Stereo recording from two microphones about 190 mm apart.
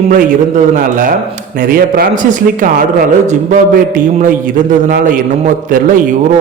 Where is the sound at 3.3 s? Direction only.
45° right (ahead or behind).